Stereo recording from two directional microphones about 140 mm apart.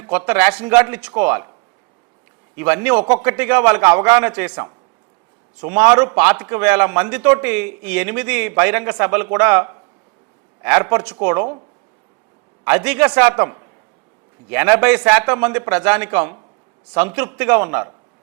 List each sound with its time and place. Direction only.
0.0 s a man's voice: 15° right (ahead or behind)
2.6 s a man's voice: 15° right (ahead or behind)
5.5 s a man's voice: 15° right (ahead or behind)
12.6 s a man's voice: 10° right (ahead or behind)